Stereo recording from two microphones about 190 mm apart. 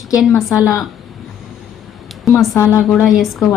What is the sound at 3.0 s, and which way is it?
Speech, centre (ahead or behind).